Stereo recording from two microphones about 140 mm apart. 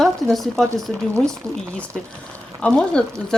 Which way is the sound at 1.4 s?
25° right (ahead or behind).